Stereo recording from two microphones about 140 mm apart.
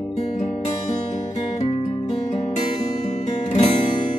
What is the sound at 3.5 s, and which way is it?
Music, 50° left (ahead or behind).